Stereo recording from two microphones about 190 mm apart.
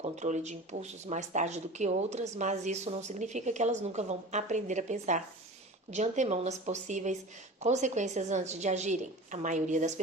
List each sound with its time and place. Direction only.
0.0 s speech: 40° right (ahead or behind)